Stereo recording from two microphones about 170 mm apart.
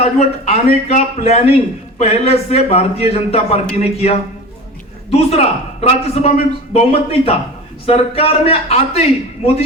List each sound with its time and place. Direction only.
0.0 s a man's voice: 35° left (ahead or behind)